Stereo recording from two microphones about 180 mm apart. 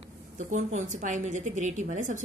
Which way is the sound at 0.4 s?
40° right (ahead or behind).